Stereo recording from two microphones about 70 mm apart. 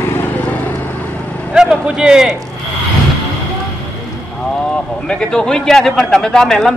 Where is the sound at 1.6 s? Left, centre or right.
Centre.